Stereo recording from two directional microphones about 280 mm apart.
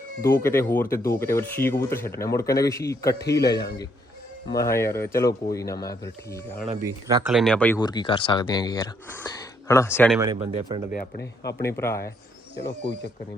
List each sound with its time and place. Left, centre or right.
0.2 s speech: centre
4.6 s speech: centre
6.8 s speech: centre
7.3 s speech: centre
10.2 s speech: centre
10.9 s speech: left
11.6 s speech: centre